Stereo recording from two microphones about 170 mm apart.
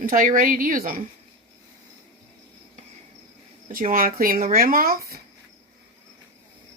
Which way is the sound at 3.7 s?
55° right (ahead or behind).